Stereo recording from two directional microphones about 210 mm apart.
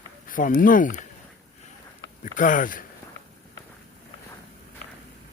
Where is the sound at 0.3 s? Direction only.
40° left (ahead or behind).